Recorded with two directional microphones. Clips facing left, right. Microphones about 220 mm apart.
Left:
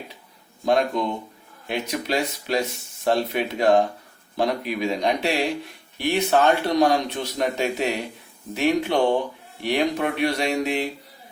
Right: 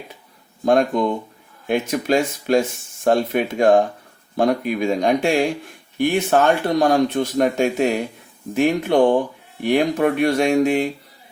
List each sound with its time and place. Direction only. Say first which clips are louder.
0.6 s speech: right 4 dB; 50° right (ahead or behind)